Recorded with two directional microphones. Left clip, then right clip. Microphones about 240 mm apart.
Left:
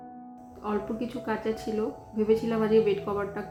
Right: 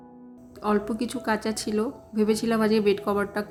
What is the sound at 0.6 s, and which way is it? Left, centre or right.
Speech, right.